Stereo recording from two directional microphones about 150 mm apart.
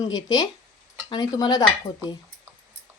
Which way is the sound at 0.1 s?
25° left (ahead or behind).